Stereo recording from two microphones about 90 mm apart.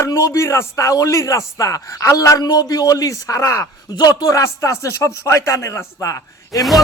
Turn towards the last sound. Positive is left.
turn(degrees=35)  # may be behind; listen again after turning